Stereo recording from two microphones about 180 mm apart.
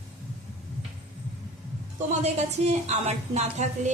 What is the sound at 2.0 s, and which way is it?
A woman's voice, 35° right (ahead or behind).